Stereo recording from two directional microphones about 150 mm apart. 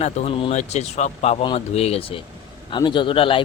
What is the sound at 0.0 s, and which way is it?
A man's voice, 45° left (ahead or behind).